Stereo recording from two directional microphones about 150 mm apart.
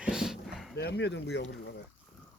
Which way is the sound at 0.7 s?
90° left.